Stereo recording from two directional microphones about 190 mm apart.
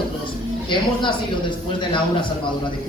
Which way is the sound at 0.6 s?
25° left (ahead or behind).